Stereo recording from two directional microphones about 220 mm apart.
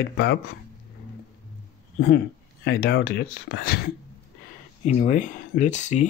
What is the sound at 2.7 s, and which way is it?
Speech, 45° left (ahead or behind).